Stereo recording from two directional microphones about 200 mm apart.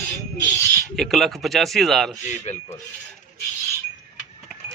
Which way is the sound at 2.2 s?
35° left (ahead or behind).